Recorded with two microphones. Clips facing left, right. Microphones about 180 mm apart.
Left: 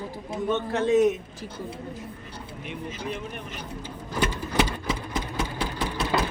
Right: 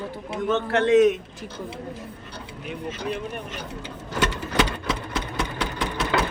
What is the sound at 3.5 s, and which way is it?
Engine, 75° right (ahead or behind).